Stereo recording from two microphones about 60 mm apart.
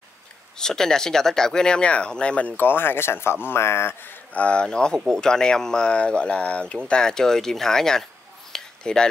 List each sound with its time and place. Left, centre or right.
0.6 s speech: centre
2.5 s speech: left
4.4 s speech: centre
6.9 s speech: centre
8.5 s a sound: centre